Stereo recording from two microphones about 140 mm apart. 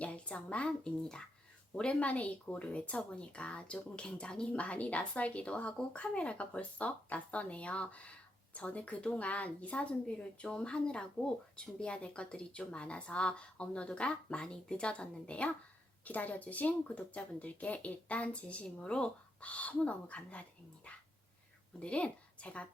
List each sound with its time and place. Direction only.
0.0 s a woman's voice: 10° left (ahead or behind)
21.8 s a woman's voice: 10° left (ahead or behind)